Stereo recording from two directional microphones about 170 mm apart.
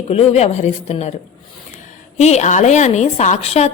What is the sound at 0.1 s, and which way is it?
A woman's voice, 35° left (ahead or behind).